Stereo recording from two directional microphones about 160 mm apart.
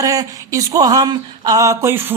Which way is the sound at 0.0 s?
20° right (ahead or behind).